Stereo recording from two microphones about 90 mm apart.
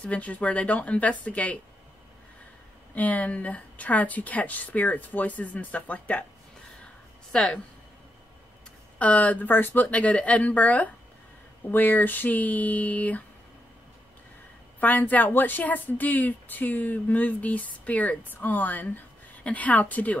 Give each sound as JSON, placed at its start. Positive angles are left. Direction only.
{"t": 0.0, "sound": "speech", "side_deg": 15}
{"t": 2.9, "sound": "speech", "side_deg": 15}
{"t": 7.3, "sound": "speech", "side_deg": 5}
{"t": 8.9, "sound": "speech", "side_deg": 15}
{"t": 14.8, "sound": "speech", "side_deg": 20}